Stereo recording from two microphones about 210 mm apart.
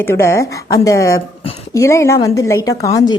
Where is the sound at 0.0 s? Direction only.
10° left (ahead or behind).